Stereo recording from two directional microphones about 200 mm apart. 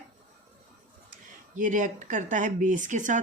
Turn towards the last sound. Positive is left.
turn(degrees=-40)  # may be behind; listen again after turning